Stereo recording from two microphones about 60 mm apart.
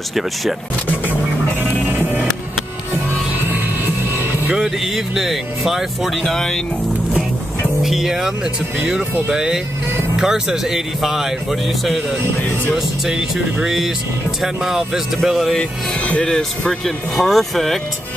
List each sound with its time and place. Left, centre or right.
3.4 s music: right
4.6 s speech: centre
6.2 s speech: centre
7.8 s speech: centre
9.3 s speech: centre
12.7 s speech: centre
16.3 s speech: centre